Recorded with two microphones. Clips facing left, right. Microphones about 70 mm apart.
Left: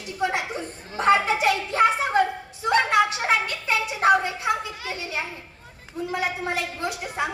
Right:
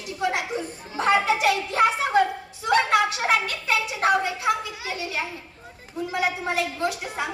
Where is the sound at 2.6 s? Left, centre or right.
Left.